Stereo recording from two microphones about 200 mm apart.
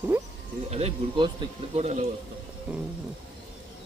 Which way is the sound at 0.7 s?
30° right (ahead or behind).